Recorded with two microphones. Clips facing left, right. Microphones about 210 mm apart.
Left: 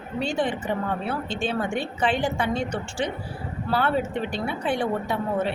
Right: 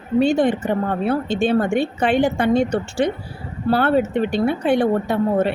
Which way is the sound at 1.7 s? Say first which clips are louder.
Right 6 dB; 65° right (ahead or behind).